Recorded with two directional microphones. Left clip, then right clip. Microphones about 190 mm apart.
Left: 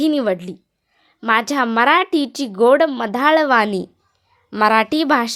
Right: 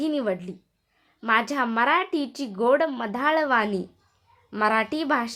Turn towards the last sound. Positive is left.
turn(degrees=45)  # may be behind; listen again after turning